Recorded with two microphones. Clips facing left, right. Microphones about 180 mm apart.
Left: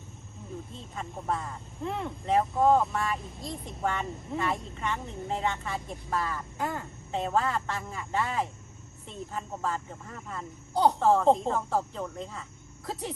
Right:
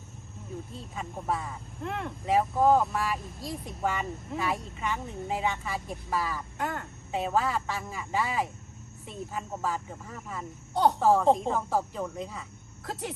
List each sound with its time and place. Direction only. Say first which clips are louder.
0.7 s speech: right 1 dB; centre (ahead or behind)